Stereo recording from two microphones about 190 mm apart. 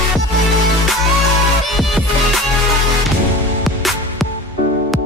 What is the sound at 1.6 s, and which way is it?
Music, centre (ahead or behind).